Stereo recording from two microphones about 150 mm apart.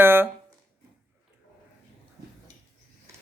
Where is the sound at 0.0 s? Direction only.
15° right (ahead or behind).